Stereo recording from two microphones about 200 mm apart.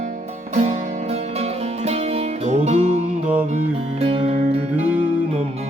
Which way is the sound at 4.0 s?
30° right (ahead or behind).